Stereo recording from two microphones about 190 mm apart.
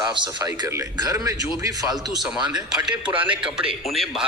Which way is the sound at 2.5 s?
5° right (ahead or behind).